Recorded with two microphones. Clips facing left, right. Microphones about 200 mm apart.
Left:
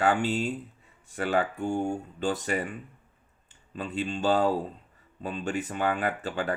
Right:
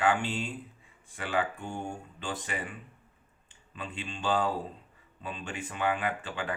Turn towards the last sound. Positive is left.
turn(degrees=40)  # may be behind; listen again after turning